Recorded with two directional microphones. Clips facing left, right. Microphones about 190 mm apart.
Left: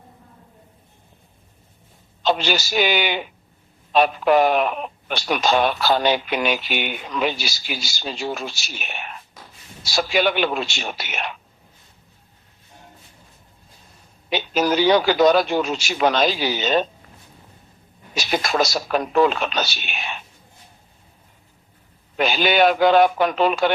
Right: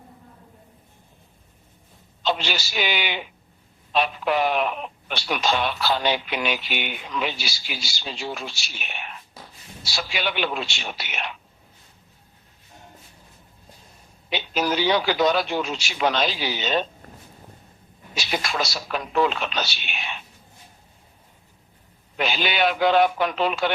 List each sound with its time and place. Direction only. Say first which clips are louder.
2.2 s speech: left 5 dB; 45° left (ahead or behind)
14.3 s speech: left 4 dB; 45° left (ahead or behind)
18.1 s speech: left 5 dB; 45° left (ahead or behind)
22.2 s speech: left 6 dB; 45° left (ahead or behind)